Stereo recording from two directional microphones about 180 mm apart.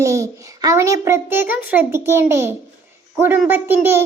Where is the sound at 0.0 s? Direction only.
15° right (ahead or behind).